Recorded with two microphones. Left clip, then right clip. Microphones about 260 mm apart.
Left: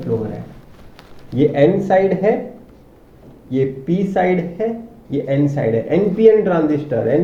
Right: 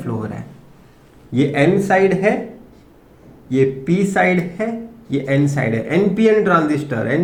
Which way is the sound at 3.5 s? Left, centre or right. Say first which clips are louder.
Right 2 dB; right.